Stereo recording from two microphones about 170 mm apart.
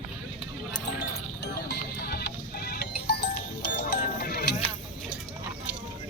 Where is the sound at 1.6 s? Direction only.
70° left (ahead or behind).